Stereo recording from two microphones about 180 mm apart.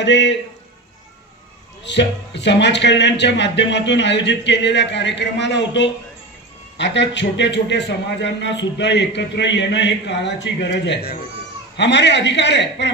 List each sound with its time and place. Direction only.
0.0 s a man's voice: 75° left (ahead or behind)
1.9 s a man's voice: 75° left (ahead or behind); by 11.2 s 60° left (ahead or behind)
11.7 s a man's voice: 75° left (ahead or behind)